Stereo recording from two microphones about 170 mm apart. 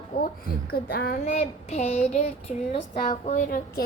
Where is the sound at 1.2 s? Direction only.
40° left (ahead or behind).